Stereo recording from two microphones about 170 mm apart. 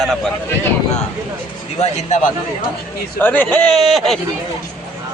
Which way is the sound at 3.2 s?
10° left (ahead or behind).